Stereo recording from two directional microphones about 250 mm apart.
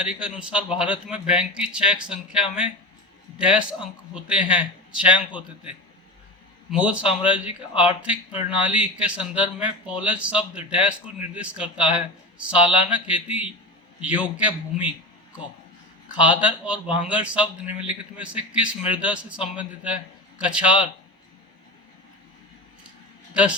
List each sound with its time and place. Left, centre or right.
0.0 s a man's voice: centre
8.3 s speech: left
8.6 s a man's voice: centre
16.1 s a man's voice: centre
23.3 s a man's voice: centre